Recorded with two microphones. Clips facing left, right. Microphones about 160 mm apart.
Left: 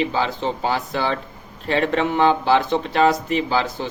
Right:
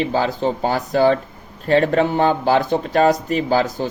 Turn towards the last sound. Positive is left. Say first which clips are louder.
# right 3 dB
turn(degrees=-45)  # may be behind; listen again after turning